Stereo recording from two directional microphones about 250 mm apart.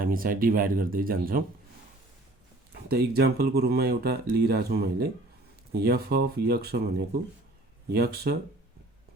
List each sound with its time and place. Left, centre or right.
0.0 s speech: right
3.2 s speech: right